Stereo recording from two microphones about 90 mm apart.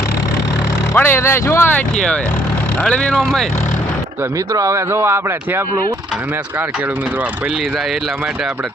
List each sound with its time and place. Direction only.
0.9 s speech: 25° left (ahead or behind)
1.7 s speech: 10° left (ahead or behind)
4.5 s speech: 35° right (ahead or behind)